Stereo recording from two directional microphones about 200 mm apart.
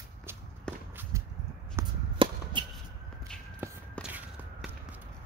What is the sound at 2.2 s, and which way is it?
Chop, 25° right (ahead or behind).